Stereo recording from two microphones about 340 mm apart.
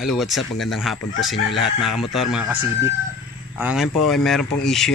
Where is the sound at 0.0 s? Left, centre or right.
Centre.